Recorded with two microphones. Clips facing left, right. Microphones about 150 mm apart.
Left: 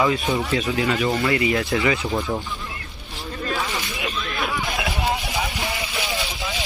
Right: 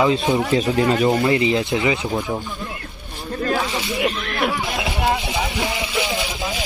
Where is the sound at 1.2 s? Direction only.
20° right (ahead or behind).